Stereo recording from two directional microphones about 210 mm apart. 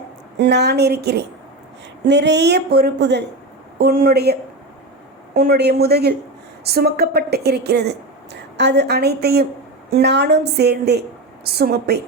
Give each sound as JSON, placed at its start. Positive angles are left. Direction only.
{"t": 0.3, "sound": "a woman's voice", "side_deg": -55}